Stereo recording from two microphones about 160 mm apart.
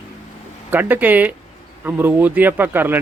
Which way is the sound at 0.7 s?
10° right (ahead or behind).